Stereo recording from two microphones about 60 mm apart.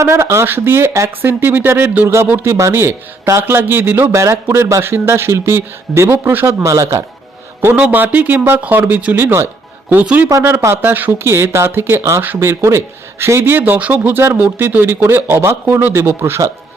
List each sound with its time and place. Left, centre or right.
0.0 s speech: right
0.4 s speech: right
3.5 s speech: right
4.1 s speech: right
7.8 s speech: right
9.1 s speech: right
9.9 s speech: right
10.4 s speech: right
10.8 s speech: right
11.3 s speech: right
12.4 s speech: right